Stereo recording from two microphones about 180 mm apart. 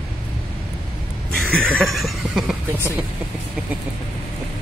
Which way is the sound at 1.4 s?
5° left (ahead or behind).